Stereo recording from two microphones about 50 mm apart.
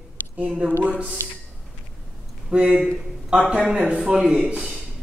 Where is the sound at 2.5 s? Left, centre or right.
Right.